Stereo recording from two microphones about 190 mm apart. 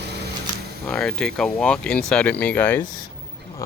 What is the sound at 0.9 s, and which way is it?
Speech, 5° left (ahead or behind).